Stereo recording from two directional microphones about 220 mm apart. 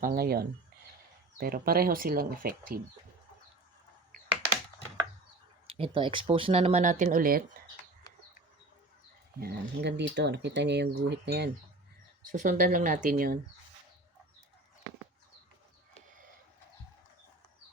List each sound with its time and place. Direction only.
0.0 s speech: 45° right (ahead or behind)
5.6 s speech: 25° right (ahead or behind); by 7.4 s 40° right (ahead or behind)
9.4 s speech: 45° right (ahead or behind)
12.3 s speech: 35° right (ahead or behind)